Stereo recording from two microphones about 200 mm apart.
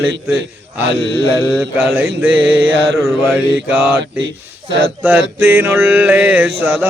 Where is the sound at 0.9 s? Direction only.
55° right (ahead or behind).